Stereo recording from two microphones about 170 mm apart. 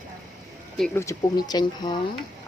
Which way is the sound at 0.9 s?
15° left (ahead or behind).